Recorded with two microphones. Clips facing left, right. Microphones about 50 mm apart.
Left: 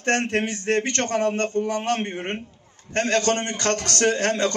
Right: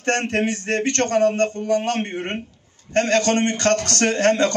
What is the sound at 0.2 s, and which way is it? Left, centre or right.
A man's voice, right.